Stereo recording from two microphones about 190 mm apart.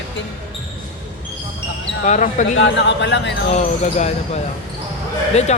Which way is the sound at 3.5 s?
35° left (ahead or behind).